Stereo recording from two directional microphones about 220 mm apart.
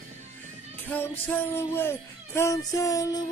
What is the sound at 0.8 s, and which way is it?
Music, 10° left (ahead or behind).